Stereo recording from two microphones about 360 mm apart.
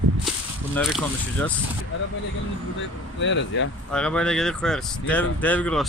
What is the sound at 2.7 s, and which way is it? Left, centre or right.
Speech, left.